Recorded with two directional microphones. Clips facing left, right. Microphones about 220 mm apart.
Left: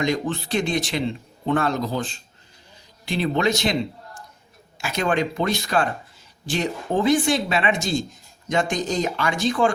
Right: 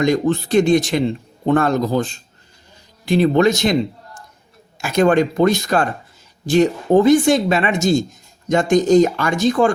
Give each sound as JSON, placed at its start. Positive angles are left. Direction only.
{"t": 0.0, "sound": "speech", "side_deg": -45}
{"t": 4.8, "sound": "speech", "side_deg": -45}